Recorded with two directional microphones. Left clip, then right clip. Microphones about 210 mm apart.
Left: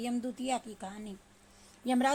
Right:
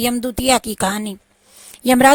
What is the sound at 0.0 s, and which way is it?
Speech, 50° right (ahead or behind).